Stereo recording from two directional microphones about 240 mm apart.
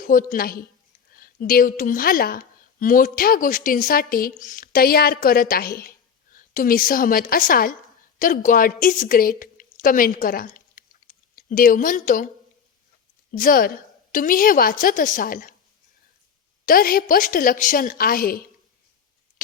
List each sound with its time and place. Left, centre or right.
0.0 s a woman's voice: left
13.3 s a woman's voice: left
16.6 s a woman's voice: left